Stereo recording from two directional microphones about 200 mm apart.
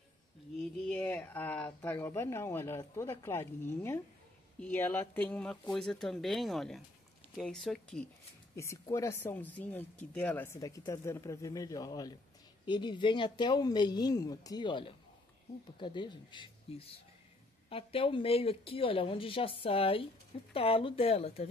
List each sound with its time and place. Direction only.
0.6 s speech: 5° left (ahead or behind)
8.5 s a woman's voice: 15° left (ahead or behind); by 21.5 s 30° left (ahead or behind)